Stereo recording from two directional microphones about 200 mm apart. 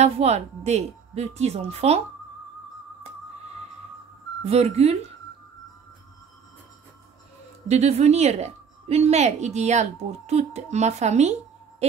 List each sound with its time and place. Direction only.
0.0 s a woman's voice: 35° right (ahead or behind)
4.5 s a woman's voice: 30° right (ahead or behind)
7.6 s a woman's voice: 35° right (ahead or behind)